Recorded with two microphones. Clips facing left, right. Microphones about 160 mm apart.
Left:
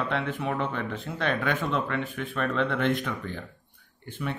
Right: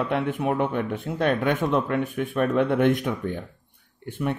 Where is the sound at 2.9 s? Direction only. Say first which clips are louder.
Right 4 dB; 50° right (ahead or behind).